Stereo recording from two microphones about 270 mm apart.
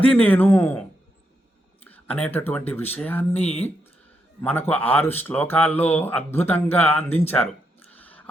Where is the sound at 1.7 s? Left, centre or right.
Centre.